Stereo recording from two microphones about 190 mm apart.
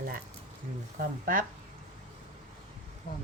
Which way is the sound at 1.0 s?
45° right (ahead or behind).